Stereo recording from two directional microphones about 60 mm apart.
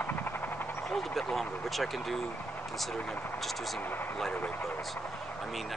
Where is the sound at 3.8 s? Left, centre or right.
Left.